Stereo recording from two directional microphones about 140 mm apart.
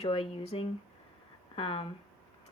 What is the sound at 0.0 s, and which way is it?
Speech, 40° left (ahead or behind).